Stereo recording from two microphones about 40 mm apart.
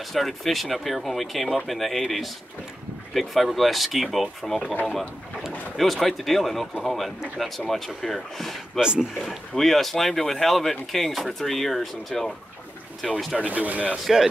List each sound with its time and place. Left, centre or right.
0.1 s speech: centre
5.8 s speech: centre
8.7 s speech: centre
9.6 s speech: centre
13.4 s speech: right